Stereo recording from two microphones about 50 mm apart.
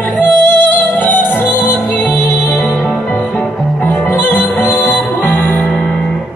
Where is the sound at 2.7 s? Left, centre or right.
Centre.